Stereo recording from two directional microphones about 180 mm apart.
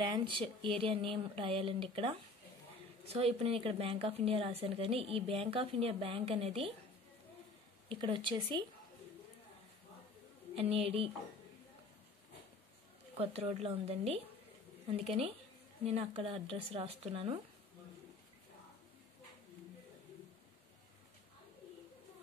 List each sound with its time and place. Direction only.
0.0 s speech: 25° right (ahead or behind)
7.9 s speech: 25° right (ahead or behind)
10.5 s speech: 35° right (ahead or behind)
13.2 s speech: 35° right (ahead or behind)